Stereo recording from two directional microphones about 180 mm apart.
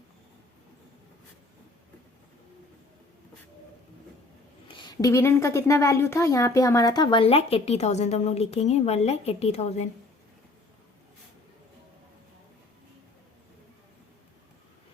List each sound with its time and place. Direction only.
4.7 s a woman's voice: 25° left (ahead or behind)